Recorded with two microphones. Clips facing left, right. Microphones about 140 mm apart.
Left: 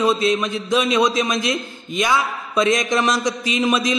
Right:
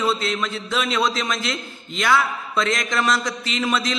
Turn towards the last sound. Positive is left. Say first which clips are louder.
# left 4 dB
turn(degrees=15)  # may be behind; listen again after turning